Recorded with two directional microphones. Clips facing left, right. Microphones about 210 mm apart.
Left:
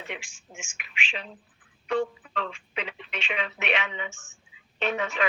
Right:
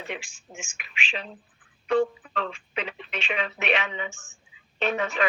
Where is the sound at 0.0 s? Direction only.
35° right (ahead or behind).